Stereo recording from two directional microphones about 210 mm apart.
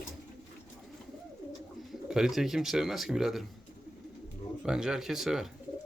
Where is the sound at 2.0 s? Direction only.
5° right (ahead or behind).